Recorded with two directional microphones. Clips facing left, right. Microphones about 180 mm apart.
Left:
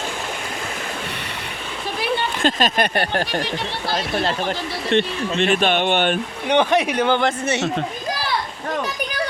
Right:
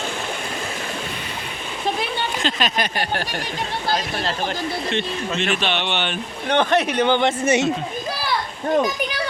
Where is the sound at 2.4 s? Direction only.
45° left (ahead or behind).